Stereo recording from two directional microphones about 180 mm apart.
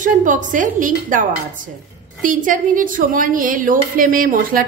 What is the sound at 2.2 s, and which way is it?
A woman's voice, 45° right (ahead or behind).